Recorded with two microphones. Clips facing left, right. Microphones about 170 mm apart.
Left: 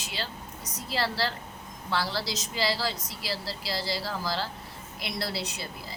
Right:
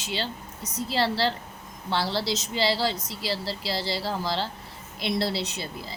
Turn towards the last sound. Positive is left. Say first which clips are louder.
# right 3 dB
turn(degrees=-25)  # may be behind; listen again after turning